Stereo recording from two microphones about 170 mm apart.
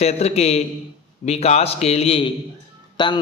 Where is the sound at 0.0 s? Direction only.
40° left (ahead or behind).